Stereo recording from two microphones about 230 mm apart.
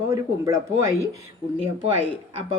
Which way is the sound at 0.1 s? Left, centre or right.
Centre.